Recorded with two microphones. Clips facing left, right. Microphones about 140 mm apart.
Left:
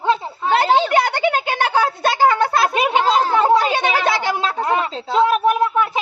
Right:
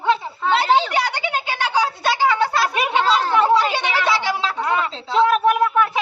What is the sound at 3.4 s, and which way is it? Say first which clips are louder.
Speech: left 2 dB; 50° left (ahead or behind).